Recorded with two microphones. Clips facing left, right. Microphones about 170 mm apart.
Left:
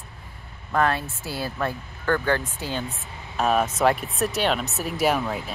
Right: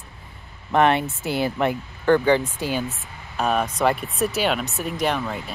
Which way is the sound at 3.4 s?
Centre (ahead or behind).